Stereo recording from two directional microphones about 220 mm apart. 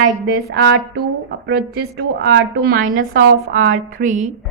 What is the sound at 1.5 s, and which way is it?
A woman's voice, 45° right (ahead or behind).